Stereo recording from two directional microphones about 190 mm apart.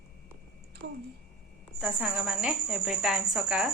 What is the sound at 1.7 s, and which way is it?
Speech, 5° right (ahead or behind).